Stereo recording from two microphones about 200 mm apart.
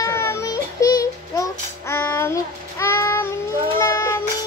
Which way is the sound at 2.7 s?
15° left (ahead or behind).